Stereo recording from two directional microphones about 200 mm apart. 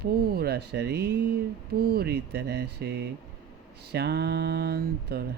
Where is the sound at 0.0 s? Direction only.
50° right (ahead or behind).